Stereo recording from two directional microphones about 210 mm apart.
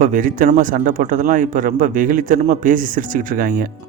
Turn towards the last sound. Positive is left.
turn(degrees=-40)  # may be behind; listen again after turning